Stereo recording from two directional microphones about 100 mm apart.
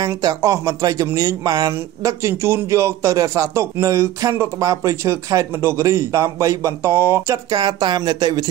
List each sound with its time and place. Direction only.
0.0 s speech: 35° right (ahead or behind)
1.7 s a man's voice: 30° right (ahead or behind)
7.5 s speech: 45° right (ahead or behind)